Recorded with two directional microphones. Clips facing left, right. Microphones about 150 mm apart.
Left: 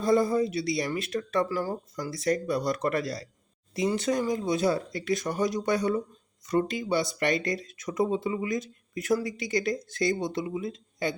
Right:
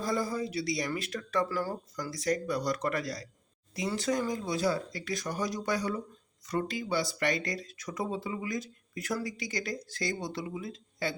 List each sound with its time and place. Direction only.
0.0 s speech: 25° left (ahead or behind)